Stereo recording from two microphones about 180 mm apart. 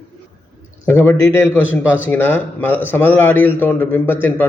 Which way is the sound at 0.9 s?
15° left (ahead or behind).